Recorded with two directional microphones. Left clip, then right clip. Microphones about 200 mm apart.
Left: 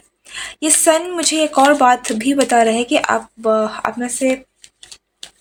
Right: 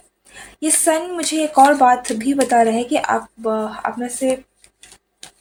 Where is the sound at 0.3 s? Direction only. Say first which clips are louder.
Left 3 dB; 30° left (ahead or behind).